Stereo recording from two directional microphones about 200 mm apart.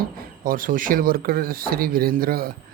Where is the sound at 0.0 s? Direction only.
45° right (ahead or behind).